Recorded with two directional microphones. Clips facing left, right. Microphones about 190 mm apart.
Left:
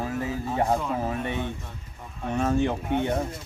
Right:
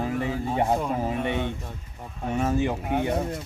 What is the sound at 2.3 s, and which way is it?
Speech, 10° right (ahead or behind).